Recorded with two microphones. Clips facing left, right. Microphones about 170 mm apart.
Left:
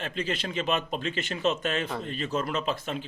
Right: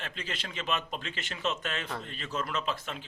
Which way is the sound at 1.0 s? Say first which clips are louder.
Left 7 dB; 45° left (ahead or behind).